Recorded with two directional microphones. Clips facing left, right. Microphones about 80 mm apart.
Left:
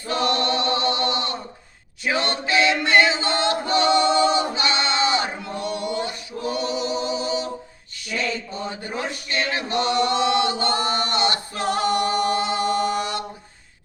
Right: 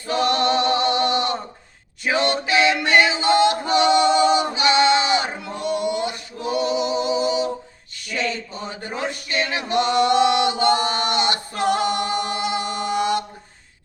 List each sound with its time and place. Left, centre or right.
0.1 s a capella: right
2.0 s a sound: right
2.8 s music: right
3.7 s a sound: centre
5.5 s music: right
7.1 s a capella: right
9.0 s male singing: right
9.9 s chant: right